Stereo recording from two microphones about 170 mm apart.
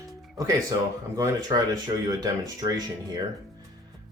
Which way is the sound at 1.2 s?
20° right (ahead or behind).